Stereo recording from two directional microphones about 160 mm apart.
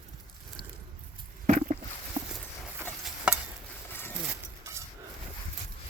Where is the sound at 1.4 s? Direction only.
45° right (ahead or behind).